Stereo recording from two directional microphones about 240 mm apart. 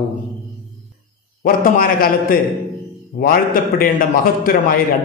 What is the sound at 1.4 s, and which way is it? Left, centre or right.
A man's voice, left.